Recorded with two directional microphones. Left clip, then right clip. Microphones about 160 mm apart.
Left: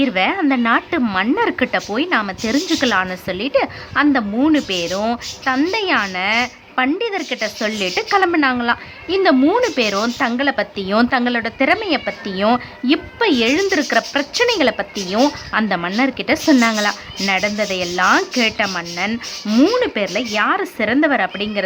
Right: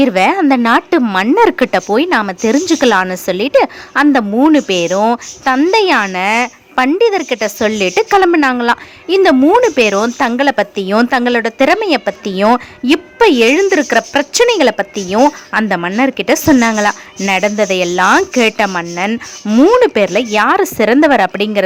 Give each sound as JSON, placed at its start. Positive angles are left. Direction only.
{"t": 0.0, "sound": "a woman's voice", "side_deg": -40}
{"t": 9.4, "sound": "a woman's voice", "side_deg": -25}
{"t": 9.6, "sound": "a woman's voice", "side_deg": -35}
{"t": 19.8, "sound": "a woman's voice", "side_deg": -40}